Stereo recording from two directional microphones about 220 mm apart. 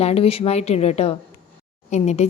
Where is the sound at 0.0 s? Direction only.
25° left (ahead or behind).